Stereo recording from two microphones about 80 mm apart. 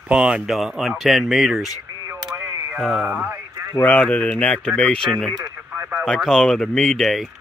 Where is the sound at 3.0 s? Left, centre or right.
Right.